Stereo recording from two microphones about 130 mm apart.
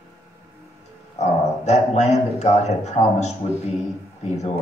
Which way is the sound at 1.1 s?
60° left (ahead or behind).